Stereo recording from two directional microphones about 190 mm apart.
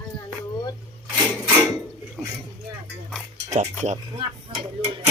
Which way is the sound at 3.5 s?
35° right (ahead or behind).